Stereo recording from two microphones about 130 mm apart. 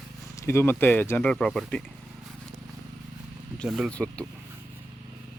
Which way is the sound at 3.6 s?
Centre (ahead or behind).